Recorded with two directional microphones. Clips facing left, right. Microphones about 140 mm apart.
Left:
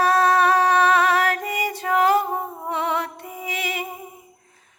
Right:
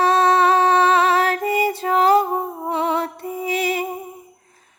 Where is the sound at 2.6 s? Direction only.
35° right (ahead or behind).